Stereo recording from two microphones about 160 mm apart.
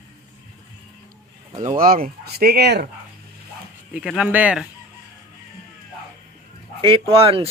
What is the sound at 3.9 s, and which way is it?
Speech, 5° right (ahead or behind).